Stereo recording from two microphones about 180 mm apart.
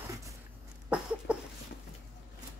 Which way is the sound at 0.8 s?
5° right (ahead or behind).